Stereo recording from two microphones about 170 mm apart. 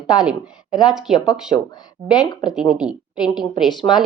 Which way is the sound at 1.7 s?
25° left (ahead or behind).